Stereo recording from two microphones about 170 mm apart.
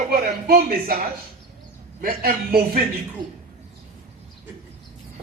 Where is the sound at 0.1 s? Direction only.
60° right (ahead or behind).